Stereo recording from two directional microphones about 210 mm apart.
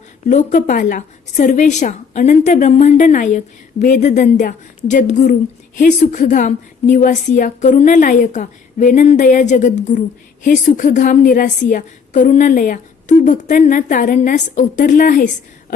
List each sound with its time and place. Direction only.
0.3 s a woman's voice: 35° left (ahead or behind)